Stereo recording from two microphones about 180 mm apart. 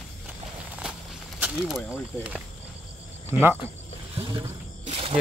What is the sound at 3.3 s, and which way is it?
Speech, 15° right (ahead or behind).